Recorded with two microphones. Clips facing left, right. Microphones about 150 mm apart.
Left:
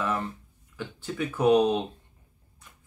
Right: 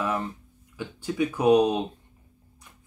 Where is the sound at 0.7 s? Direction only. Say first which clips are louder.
Right 5 dB; 15° right (ahead or behind).